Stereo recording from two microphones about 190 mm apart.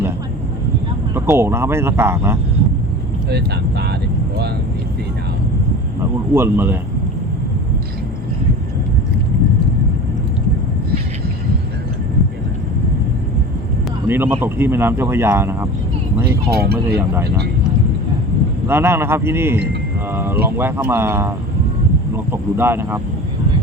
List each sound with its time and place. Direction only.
1.1 s speech: 10° right (ahead or behind)
3.2 s speech: 60° right (ahead or behind)
6.3 s speech: 10° right (ahead or behind)
14.1 s speech: 10° right (ahead or behind)
16.5 s speech: 55° right (ahead or behind)
18.7 s speech: 10° right (ahead or behind)